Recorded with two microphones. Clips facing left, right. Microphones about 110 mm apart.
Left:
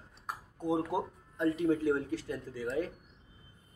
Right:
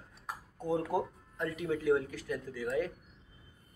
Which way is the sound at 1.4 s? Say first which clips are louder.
Left 4 dB; 30° left (ahead or behind).